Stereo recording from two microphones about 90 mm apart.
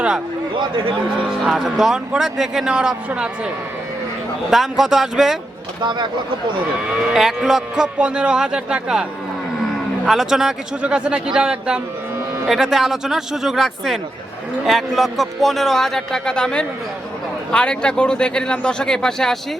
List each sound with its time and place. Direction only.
0.5 s a man's voice: 70° right (ahead or behind)
1.5 s a man's voice: 5° right (ahead or behind)
4.5 s a man's voice: 5° right (ahead or behind)
5.8 s speech: 60° right (ahead or behind)
7.1 s a man's voice: 5° right (ahead or behind)
10.1 s a man's voice: 5° right (ahead or behind)